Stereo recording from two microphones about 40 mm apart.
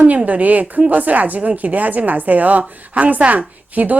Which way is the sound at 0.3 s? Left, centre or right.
Right.